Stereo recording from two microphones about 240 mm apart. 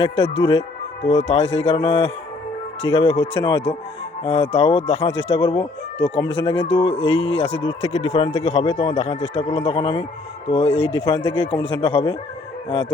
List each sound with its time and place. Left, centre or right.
0.0 s speech: left